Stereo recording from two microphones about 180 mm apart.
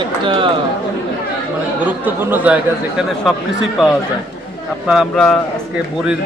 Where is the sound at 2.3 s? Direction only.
10° right (ahead or behind).